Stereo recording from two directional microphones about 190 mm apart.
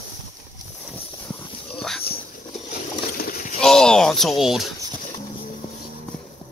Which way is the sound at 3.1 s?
50° left (ahead or behind).